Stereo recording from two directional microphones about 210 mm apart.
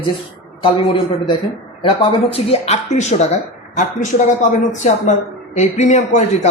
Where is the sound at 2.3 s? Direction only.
30° left (ahead or behind).